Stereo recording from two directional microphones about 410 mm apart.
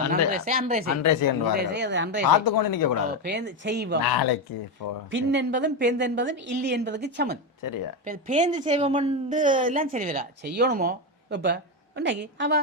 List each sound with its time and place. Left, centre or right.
0.3 s a woman's voice: centre
0.9 s speech: left
1.5 s a woman's voice: right
2.2 s speech: left
3.1 s a woman's voice: right
4.0 s speech: left
5.1 s a woman's voice: right
7.6 s speech: left
8.0 s a woman's voice: centre